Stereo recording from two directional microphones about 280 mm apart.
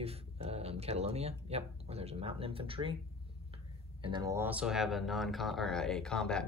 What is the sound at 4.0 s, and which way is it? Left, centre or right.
Speech, centre.